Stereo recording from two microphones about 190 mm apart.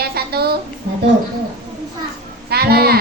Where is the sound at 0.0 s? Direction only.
55° right (ahead or behind).